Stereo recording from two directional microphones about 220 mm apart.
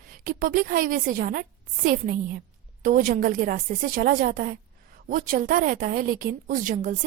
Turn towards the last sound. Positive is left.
turn(degrees=-35)  # may be behind; listen again after turning